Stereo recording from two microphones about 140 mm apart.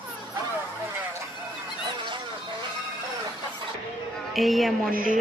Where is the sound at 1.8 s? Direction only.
35° right (ahead or behind).